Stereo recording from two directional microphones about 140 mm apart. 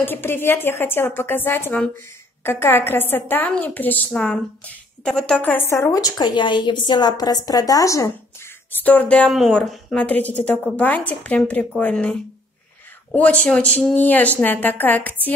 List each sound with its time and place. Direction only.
0.0 s a woman's voice: 15° left (ahead or behind)
8.8 s a woman's voice: 10° left (ahead or behind)